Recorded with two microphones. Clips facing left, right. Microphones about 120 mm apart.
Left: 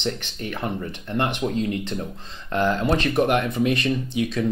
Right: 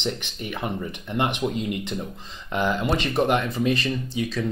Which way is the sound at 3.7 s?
65° left (ahead or behind).